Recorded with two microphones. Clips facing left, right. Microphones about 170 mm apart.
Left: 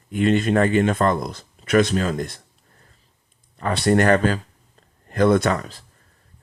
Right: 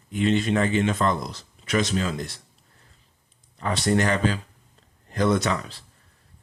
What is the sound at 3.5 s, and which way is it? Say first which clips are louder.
Speech: left 4 dB; 60° left (ahead or behind).